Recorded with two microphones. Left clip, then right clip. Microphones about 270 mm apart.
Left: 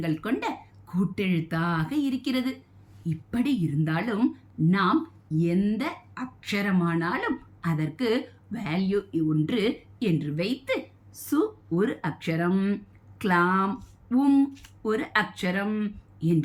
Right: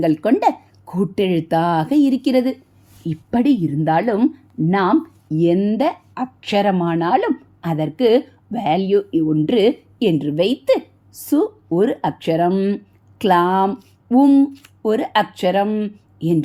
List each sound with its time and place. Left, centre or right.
0.0 s speech: centre